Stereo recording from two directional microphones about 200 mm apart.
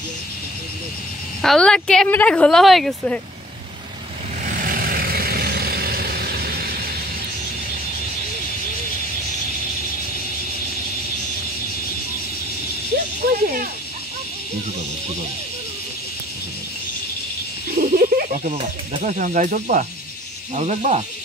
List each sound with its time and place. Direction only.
1.4 s speech: 5° left (ahead or behind)
4.5 s vehicle: 45° right (ahead or behind)
13.2 s a sound: 45° right (ahead or behind)
17.7 s speech: 45° right (ahead or behind)